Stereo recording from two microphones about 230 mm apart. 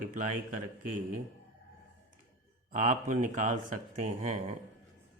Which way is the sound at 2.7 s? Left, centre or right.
Right.